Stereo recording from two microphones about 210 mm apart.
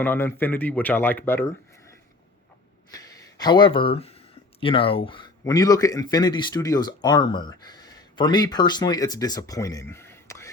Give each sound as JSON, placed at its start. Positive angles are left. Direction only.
{"t": 0.0, "sound": "speech", "side_deg": 10}
{"t": 2.9, "sound": "speech", "side_deg": 20}